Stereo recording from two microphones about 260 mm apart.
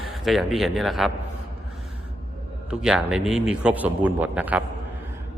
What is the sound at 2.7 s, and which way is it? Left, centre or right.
Speech, centre.